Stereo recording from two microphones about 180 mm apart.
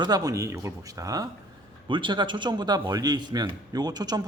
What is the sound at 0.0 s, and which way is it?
A man's voice, 20° right (ahead or behind).